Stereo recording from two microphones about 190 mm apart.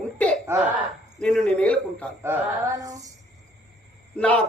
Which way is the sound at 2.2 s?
15° right (ahead or behind).